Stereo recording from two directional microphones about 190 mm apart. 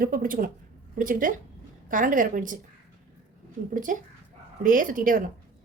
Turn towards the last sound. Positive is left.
turn(degrees=-45)  # may be behind; listen again after turning